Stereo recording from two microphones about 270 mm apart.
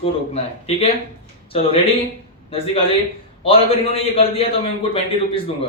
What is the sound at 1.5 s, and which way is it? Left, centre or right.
Speech, left.